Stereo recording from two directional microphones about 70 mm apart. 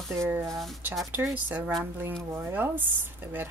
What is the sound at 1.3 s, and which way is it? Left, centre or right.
Speech, right.